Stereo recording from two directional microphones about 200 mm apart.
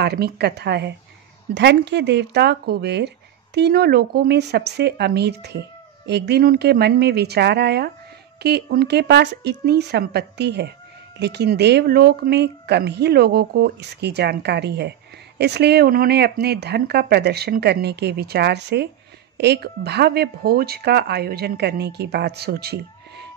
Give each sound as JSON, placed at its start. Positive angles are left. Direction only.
{"t": 0.0, "sound": "speech", "side_deg": -55}